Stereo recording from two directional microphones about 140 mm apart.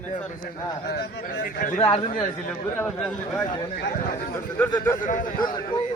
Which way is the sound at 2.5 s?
10° left (ahead or behind).